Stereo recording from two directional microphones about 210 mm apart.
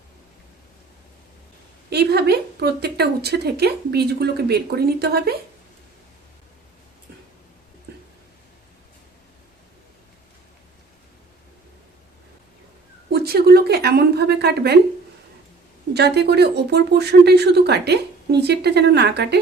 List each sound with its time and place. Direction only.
1.9 s speech: 50° right (ahead or behind)
13.1 s a woman's voice: 45° right (ahead or behind)
15.9 s speech: 50° right (ahead or behind)